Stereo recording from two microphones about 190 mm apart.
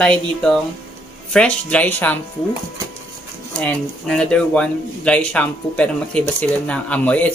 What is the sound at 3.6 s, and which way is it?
Speech, 5° left (ahead or behind).